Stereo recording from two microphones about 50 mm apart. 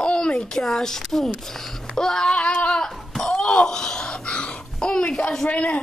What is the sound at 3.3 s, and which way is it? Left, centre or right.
A child's voice, centre.